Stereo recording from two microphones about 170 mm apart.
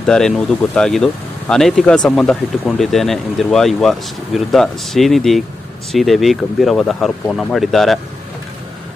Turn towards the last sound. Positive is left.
turn(degrees=0)  # may be behind; listen again after turning